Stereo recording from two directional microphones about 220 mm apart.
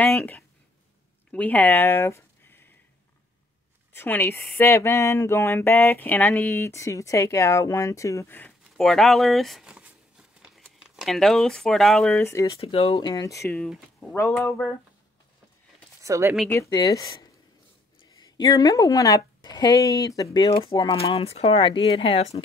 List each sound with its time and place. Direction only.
0.0 s speech: 5° left (ahead or behind)
3.9 s speech: 10° left (ahead or behind)
12.2 s speech: 15° left (ahead or behind)
12.5 s speech: 25° left (ahead or behind); by 14.7 s 10° left (ahead or behind)
16.0 s speech: 15° right (ahead or behind)
16.4 s speech: 15° left (ahead or behind)